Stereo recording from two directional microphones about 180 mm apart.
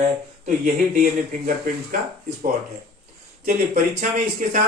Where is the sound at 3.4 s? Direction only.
45° right (ahead or behind).